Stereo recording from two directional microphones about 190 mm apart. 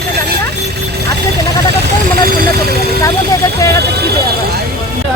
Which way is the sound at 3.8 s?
60° right (ahead or behind).